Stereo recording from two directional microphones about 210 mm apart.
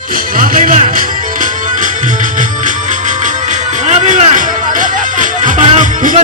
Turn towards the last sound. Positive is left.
turn(degrees=-35)  # may be behind; listen again after turning